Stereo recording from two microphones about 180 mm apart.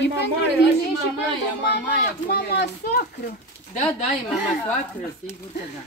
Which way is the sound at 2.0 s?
65° left (ahead or behind).